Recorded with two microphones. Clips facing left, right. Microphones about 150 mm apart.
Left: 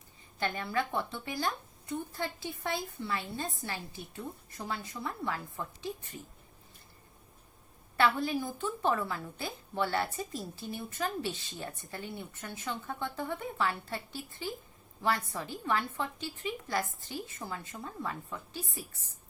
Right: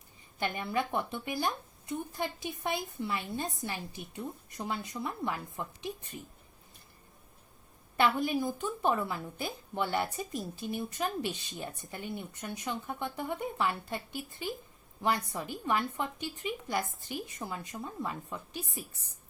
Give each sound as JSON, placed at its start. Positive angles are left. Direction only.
{"t": 0.3, "sound": "a woman's voice", "side_deg": -15}
{"t": 7.9, "sound": "a woman's voice", "side_deg": -15}